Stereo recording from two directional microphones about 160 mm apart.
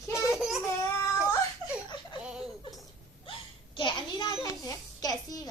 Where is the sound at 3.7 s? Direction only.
30° left (ahead or behind).